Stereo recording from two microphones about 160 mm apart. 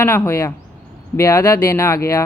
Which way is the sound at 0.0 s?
15° left (ahead or behind).